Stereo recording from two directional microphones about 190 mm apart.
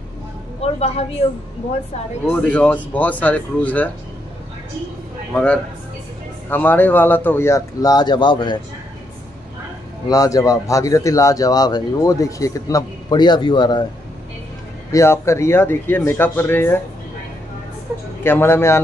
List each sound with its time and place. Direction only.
0.6 s speech: 35° left (ahead or behind)
2.2 s speech: 5° left (ahead or behind)
5.3 s speech: 5° left (ahead or behind); by 8.5 s 25° left (ahead or behind)
10.0 s speech: 20° left (ahead or behind)
14.9 s speech: 15° left (ahead or behind)
18.2 s speech: 10° left (ahead or behind)